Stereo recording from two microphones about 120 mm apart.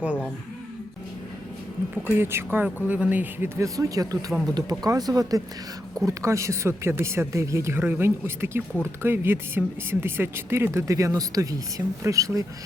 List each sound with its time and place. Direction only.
0.0 s speech: 10° right (ahead or behind)
2.0 s speech: 20° right (ahead or behind)
4.3 s speech: centre (ahead or behind)
4.9 s speech: 30° right (ahead or behind)